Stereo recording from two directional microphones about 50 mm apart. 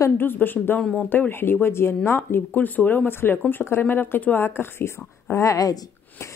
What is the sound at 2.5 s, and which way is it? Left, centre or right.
Speech, left.